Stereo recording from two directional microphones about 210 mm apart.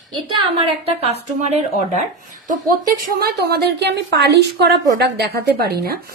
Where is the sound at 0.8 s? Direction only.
30° right (ahead or behind).